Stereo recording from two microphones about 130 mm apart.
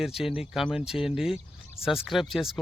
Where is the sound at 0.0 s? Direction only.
5° right (ahead or behind).